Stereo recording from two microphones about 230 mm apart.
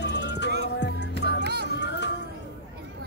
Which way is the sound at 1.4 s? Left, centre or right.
Right.